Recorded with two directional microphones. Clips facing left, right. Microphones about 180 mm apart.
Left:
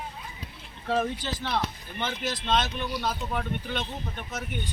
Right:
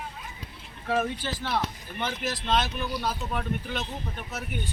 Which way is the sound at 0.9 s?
5° right (ahead or behind).